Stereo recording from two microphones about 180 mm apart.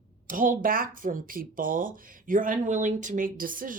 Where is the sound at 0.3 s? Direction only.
45° right (ahead or behind).